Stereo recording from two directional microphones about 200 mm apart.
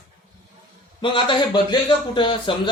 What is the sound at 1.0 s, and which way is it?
Speech, 25° left (ahead or behind).